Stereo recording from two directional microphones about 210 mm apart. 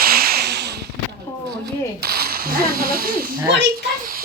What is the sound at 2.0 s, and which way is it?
Speech, 45° right (ahead or behind).